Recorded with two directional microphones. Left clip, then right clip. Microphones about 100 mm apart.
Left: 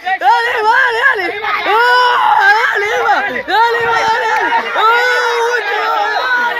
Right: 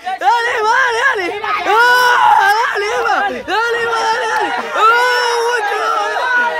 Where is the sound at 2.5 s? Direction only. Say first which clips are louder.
Left 2 dB; 5° right (ahead or behind).